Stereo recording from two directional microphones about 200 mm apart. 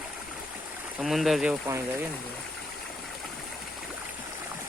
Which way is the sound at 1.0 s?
Centre (ahead or behind).